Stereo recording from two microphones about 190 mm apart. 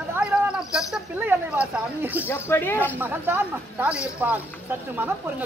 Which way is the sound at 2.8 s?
10° right (ahead or behind).